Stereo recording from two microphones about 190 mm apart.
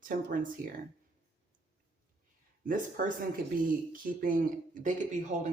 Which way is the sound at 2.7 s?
45° right (ahead or behind).